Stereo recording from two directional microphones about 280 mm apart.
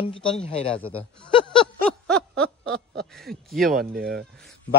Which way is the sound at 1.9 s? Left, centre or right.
Centre.